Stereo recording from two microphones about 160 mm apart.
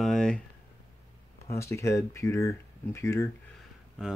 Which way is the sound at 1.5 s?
20° left (ahead or behind).